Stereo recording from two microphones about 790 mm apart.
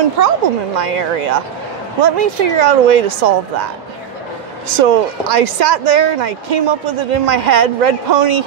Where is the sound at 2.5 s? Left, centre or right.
Right.